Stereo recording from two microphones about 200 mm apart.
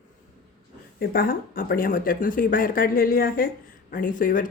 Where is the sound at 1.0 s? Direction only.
45° left (ahead or behind).